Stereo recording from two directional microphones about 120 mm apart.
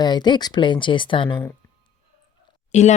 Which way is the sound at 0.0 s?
35° left (ahead or behind).